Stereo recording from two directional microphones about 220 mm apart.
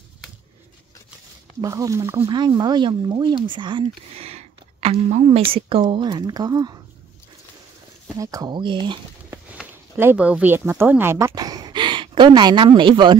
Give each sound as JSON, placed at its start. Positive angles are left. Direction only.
{"t": 1.6, "sound": "speech", "side_deg": -15}
{"t": 8.2, "sound": "speech", "side_deg": -15}
{"t": 9.3, "sound": "speech", "side_deg": -10}